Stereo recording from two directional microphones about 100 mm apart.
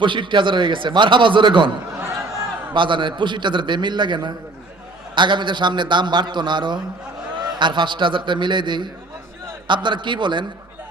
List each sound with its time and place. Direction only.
0.0 s a man's voice: 55° right (ahead or behind)
2.7 s a man's voice: 50° right (ahead or behind)